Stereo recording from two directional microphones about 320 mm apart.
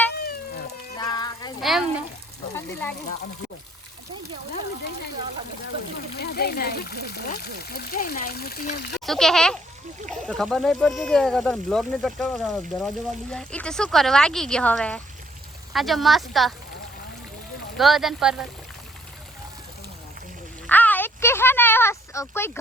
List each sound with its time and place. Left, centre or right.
0.9 s a sound: centre
1.6 s speech: centre
6.1 s speech: left
9.0 s speech: centre
17.7 s speech: centre
20.7 s a sound: centre